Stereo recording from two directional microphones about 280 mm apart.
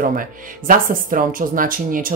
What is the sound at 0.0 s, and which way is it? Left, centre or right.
Speech, right.